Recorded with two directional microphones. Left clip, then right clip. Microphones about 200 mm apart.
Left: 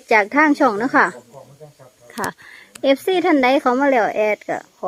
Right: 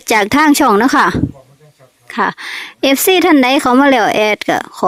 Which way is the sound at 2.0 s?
25° right (ahead or behind).